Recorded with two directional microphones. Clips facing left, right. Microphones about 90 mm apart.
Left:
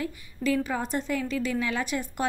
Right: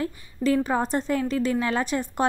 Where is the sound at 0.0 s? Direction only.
35° right (ahead or behind).